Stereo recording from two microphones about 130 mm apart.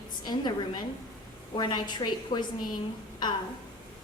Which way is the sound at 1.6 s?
35° left (ahead or behind).